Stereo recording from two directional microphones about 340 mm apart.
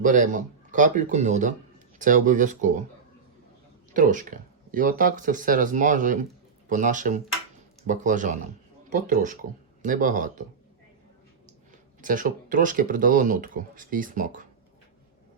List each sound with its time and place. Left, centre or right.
0.0 s speech: right
3.9 s speech: right
12.0 s speech: right